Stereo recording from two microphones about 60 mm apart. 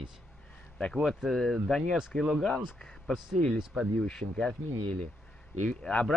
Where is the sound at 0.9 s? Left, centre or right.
Centre.